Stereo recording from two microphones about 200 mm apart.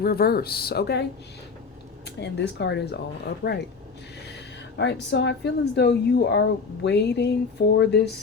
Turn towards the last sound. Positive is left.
turn(degrees=60)  # may be behind; listen again after turning